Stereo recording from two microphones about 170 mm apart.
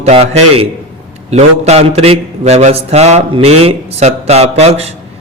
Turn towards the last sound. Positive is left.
turn(degrees=-35)  # may be behind; listen again after turning